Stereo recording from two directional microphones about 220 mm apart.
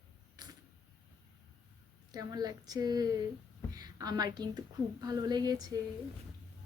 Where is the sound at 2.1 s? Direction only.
15° right (ahead or behind).